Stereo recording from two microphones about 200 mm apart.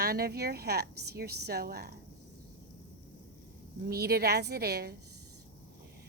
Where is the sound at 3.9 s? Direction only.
50° right (ahead or behind).